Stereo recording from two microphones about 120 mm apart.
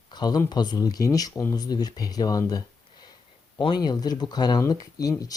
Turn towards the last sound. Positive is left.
turn(degrees=30)  # may be behind; listen again after turning